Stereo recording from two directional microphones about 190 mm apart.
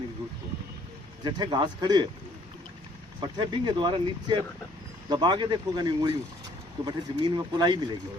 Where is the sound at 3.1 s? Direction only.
25° right (ahead or behind).